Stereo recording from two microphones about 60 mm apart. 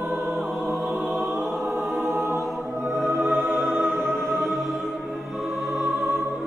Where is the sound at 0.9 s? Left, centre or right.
Right.